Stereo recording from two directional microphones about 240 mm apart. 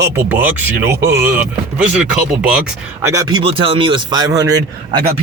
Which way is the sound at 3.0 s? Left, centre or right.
Centre.